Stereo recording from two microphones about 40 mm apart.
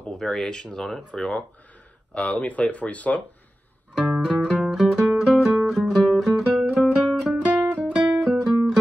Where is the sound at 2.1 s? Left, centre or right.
Left.